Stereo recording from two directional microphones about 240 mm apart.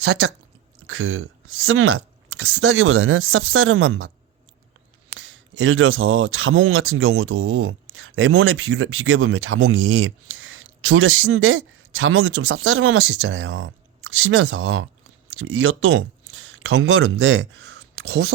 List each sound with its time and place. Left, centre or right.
0.0 s a man's voice: right
5.3 s a man's voice: right